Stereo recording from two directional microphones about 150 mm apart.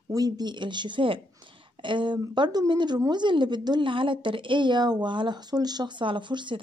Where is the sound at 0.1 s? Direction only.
25° right (ahead or behind).